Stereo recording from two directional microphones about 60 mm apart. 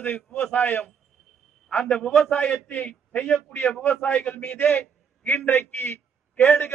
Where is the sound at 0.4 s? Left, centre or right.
Left.